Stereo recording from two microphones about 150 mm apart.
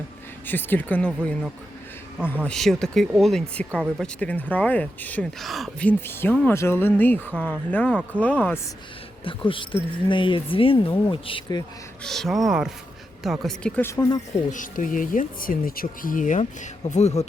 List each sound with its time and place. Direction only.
0.4 s speech: 15° left (ahead or behind)
2.5 s speech: 5° left (ahead or behind)
9.2 s speech: 35° left (ahead or behind)
12.0 s speech: centre (ahead or behind); by 14.2 s 20° left (ahead or behind)
14.5 s speech: 60° left (ahead or behind)